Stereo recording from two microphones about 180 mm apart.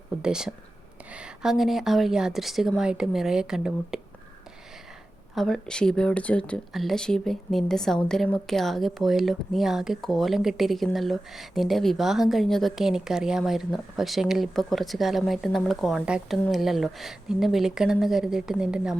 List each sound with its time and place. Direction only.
0.2 s speech: 5° right (ahead or behind)
5.3 s speech: centre (ahead or behind)